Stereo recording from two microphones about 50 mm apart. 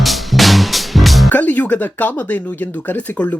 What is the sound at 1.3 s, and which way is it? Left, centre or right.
Speech, left.